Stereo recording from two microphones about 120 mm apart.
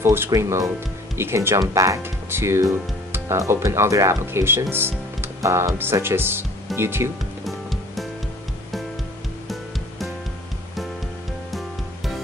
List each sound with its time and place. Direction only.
0.0 s speech: 20° right (ahead or behind)
7.4 s music: centre (ahead or behind)